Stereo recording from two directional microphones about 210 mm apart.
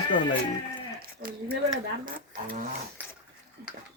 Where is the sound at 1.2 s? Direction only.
45° right (ahead or behind).